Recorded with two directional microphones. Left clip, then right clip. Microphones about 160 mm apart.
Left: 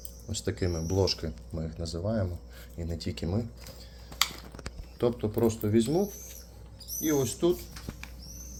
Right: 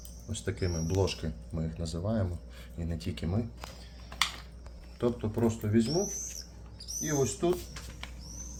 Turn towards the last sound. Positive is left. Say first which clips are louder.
# left 3 dB
turn(degrees=55)  # may be behind; listen again after turning